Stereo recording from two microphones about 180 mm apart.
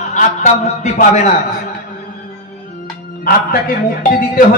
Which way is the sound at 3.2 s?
55° left (ahead or behind).